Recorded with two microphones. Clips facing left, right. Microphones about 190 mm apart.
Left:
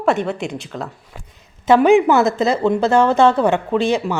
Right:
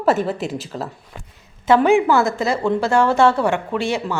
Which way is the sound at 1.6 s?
15° left (ahead or behind).